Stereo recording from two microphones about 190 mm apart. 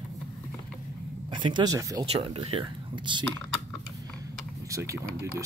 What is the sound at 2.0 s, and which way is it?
Speech, 30° right (ahead or behind).